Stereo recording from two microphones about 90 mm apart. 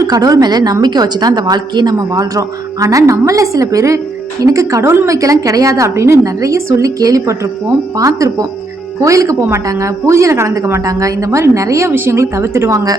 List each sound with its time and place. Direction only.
0.1 s a woman's voice: 45° right (ahead or behind)
2.0 s a woman's voice: 40° right (ahead or behind)